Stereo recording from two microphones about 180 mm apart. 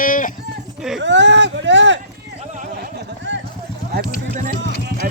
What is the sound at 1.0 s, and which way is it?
Speech, 80° right.